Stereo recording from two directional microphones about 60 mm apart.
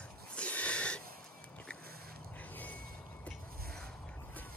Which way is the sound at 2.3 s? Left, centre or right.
Left.